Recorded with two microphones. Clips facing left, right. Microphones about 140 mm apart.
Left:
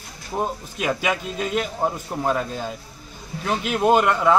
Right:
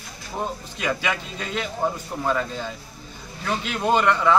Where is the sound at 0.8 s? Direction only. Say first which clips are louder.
Left 3 dB; 10° left (ahead or behind).